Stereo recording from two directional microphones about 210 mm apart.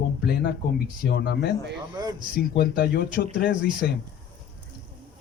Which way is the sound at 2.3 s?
45° left (ahead or behind).